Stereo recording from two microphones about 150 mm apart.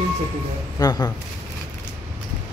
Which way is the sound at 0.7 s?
25° left (ahead or behind).